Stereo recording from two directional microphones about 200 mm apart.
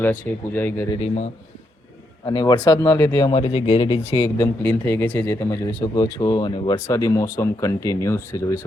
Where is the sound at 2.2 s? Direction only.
20° left (ahead or behind).